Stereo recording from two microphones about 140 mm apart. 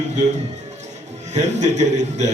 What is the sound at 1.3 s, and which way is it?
Speech, 55° right (ahead or behind).